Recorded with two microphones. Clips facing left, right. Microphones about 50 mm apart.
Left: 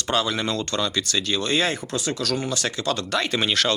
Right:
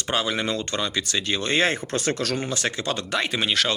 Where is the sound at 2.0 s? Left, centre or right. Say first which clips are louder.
Right 1 dB; right.